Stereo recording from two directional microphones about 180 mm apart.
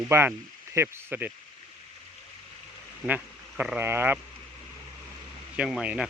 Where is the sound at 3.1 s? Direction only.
10° right (ahead or behind).